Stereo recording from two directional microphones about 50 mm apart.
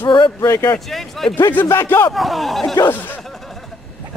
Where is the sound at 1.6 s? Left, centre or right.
Left.